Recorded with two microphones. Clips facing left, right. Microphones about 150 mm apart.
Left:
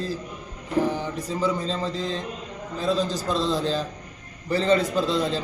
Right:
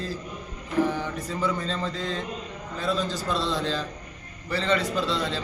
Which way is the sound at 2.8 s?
40° left (ahead or behind).